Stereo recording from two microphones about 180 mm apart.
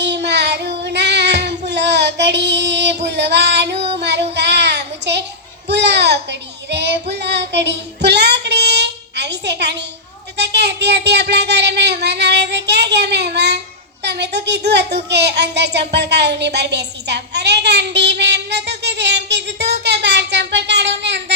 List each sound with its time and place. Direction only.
0.0 s child singing: 75° right (ahead or behind)
5.6 s baby cry: 70° right (ahead or behind)
6.7 s child singing: 70° right (ahead or behind)
10.3 s a sound: 70° right (ahead or behind)
14.0 s child singing: 70° right (ahead or behind)